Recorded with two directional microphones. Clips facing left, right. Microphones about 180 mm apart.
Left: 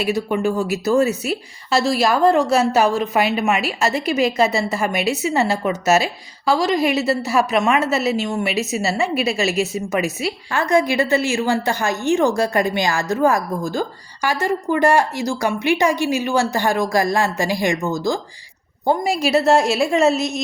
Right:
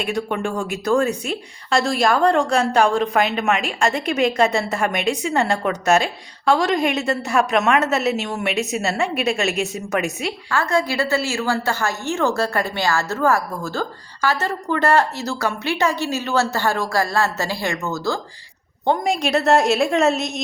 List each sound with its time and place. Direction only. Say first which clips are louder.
0.0 s a woman's voice: left 4 dB; 5° left (ahead or behind)
10.5 s a woman's voice: left 3 dB; 20° left (ahead or behind)
18.9 s a woman's voice: left 1 dB; 5° left (ahead or behind)